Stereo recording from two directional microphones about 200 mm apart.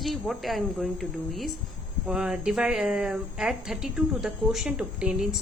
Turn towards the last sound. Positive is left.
turn(degrees=-5)  # may be behind; listen again after turning